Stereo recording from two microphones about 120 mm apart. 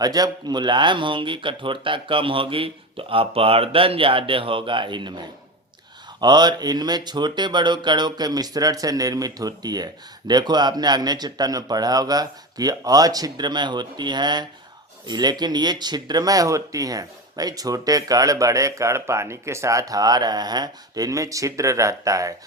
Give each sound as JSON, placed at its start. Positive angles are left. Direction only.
{"t": 0.0, "sound": "speech", "side_deg": -35}